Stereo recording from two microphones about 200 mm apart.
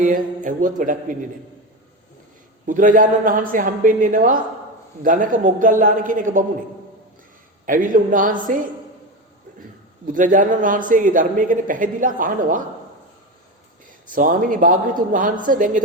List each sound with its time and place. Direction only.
0.0 s a man's voice: 40° right (ahead or behind)
2.6 s a man's voice: 40° right (ahead or behind)
7.6 s a man's voice: 40° right (ahead or behind)
10.1 s a man's voice: 40° right (ahead or behind)
14.2 s a man's voice: 40° right (ahead or behind)